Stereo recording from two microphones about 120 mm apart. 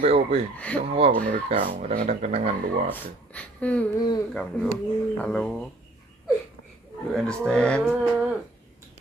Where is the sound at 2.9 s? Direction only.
10° left (ahead or behind).